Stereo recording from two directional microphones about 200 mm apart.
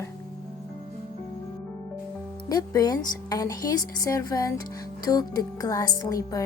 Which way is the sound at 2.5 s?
20° left (ahead or behind).